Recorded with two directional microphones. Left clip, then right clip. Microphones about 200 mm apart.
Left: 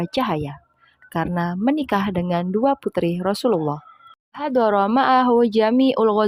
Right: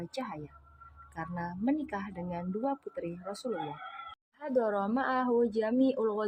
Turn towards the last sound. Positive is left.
turn(degrees=45)  # may be behind; listen again after turning